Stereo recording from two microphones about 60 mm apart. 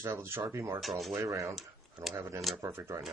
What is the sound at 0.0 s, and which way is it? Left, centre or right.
Speech, right.